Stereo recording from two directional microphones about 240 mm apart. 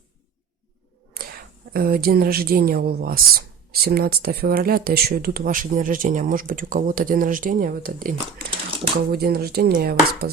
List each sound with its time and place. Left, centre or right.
1.1 s speech: right